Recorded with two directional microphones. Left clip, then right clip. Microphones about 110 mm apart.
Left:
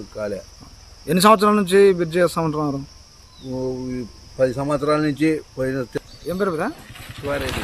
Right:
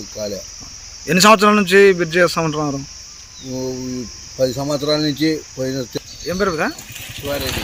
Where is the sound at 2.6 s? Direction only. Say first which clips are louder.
Right 2 dB; 5° right (ahead or behind).